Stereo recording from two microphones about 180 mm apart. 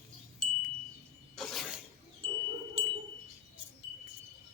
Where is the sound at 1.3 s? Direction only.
Centre (ahead or behind).